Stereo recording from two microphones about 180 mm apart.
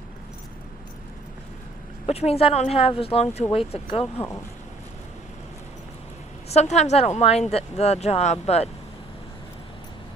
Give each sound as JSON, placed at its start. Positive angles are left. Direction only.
{"t": 2.0, "sound": "speech", "side_deg": 35}
{"t": 6.5, "sound": "speech", "side_deg": 40}